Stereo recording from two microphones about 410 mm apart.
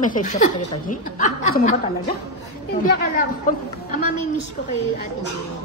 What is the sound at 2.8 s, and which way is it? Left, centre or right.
Speech, centre.